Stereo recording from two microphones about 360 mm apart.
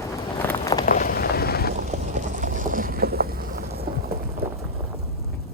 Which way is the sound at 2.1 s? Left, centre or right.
Right.